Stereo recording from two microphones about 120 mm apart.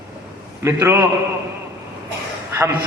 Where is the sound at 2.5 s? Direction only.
20° right (ahead or behind).